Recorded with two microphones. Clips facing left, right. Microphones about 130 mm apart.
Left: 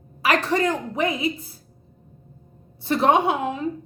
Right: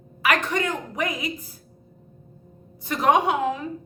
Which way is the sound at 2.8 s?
30° left (ahead or behind).